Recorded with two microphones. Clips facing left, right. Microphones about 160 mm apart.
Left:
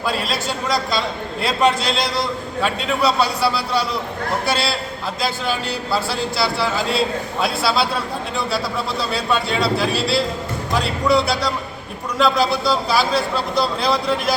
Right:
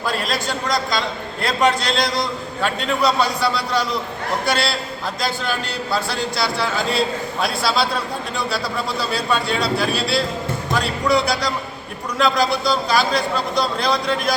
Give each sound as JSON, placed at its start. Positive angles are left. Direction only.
{"t": 0.1, "sound": "a man's voice", "side_deg": 5}